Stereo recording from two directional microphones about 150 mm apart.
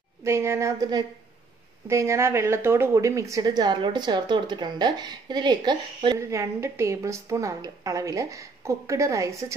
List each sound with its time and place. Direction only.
0.2 s a woman's voice: 15° right (ahead or behind)
6.1 s a woman's voice: 20° right (ahead or behind)